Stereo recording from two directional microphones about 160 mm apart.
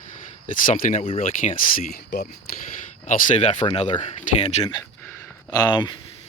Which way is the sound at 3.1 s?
50° left (ahead or behind).